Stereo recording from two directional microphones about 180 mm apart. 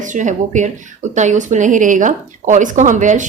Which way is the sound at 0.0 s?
45° right (ahead or behind).